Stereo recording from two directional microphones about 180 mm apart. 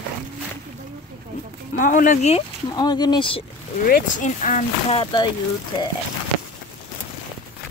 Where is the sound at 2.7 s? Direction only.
25° left (ahead or behind).